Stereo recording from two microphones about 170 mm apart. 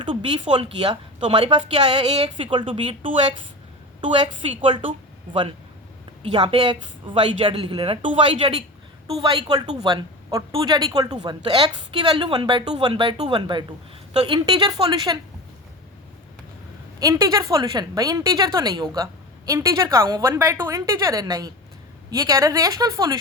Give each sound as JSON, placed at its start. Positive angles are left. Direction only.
{"t": 0.0, "sound": "a woman's voice", "side_deg": -30}
{"t": 4.4, "sound": "speech", "side_deg": -30}
{"t": 6.3, "sound": "a woman's voice", "side_deg": -25}
{"t": 17.0, "sound": "a woman's voice", "side_deg": -20}